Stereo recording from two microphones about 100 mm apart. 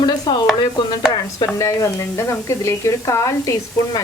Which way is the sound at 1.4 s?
30° left (ahead or behind).